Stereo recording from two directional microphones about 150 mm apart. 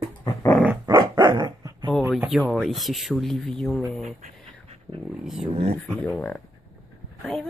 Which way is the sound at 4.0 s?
55° right (ahead or behind).